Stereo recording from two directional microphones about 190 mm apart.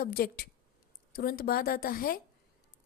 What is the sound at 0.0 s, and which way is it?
A woman's voice, 55° left (ahead or behind).